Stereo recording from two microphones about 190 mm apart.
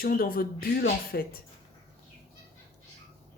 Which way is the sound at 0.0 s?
50° left (ahead or behind).